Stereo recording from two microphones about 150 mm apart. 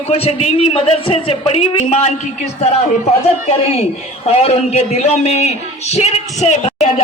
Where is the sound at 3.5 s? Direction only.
40° left (ahead or behind).